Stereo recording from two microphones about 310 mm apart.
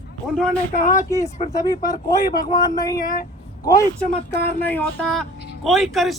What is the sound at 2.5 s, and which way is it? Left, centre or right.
Speech, centre.